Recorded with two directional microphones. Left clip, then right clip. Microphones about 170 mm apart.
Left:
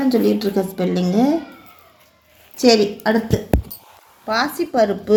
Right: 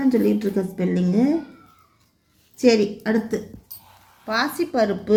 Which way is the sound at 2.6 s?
20° right (ahead or behind).